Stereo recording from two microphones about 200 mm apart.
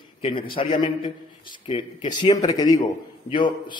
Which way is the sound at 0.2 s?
25° left (ahead or behind).